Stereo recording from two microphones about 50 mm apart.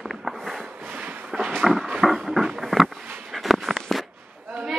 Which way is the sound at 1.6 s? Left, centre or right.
Centre.